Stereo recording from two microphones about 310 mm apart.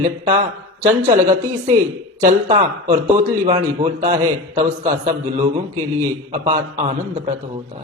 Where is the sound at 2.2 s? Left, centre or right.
Centre.